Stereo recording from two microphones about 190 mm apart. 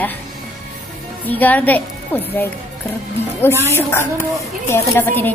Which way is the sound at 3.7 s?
15° left (ahead or behind).